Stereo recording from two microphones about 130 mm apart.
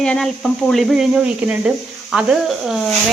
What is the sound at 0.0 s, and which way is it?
Speech, 5° left (ahead or behind).